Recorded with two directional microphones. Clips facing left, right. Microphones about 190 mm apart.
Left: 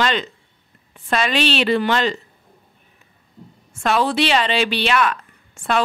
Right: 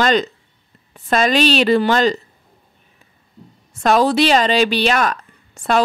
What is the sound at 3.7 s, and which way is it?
Speech, 40° right (ahead or behind).